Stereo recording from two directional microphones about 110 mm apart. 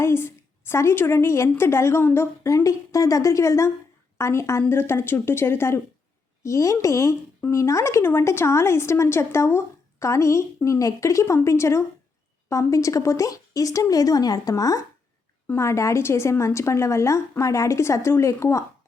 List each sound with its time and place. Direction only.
0.0 s a woman's voice: 20° left (ahead or behind)